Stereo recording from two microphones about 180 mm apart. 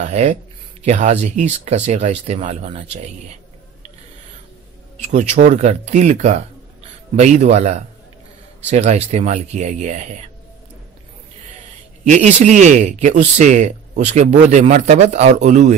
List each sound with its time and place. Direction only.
0.0 s speech: 40° right (ahead or behind)
4.9 s speech: 40° right (ahead or behind)
12.0 s speech: 40° right (ahead or behind)